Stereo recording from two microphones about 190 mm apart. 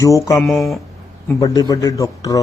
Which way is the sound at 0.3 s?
Centre (ahead or behind).